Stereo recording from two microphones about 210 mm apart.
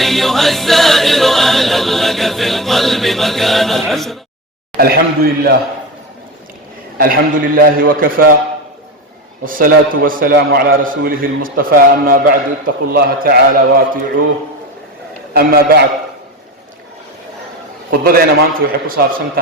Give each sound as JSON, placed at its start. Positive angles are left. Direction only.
{"t": 0.0, "sound": "a capella", "side_deg": 0}
{"t": 4.8, "sound": "a man's voice", "side_deg": -45}
{"t": 7.0, "sound": "a man's voice", "side_deg": -45}
{"t": 9.4, "sound": "a man's voice", "side_deg": -40}
{"t": 15.3, "sound": "a man's voice", "side_deg": -45}
{"t": 18.0, "sound": "a man's voice", "side_deg": -45}